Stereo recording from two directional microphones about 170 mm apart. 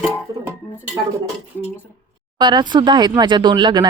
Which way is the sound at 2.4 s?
25° right (ahead or behind).